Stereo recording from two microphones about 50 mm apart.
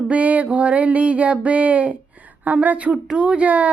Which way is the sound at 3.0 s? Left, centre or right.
Centre.